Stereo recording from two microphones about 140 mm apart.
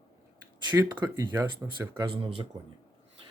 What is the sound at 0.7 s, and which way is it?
Speech, 20° right (ahead or behind).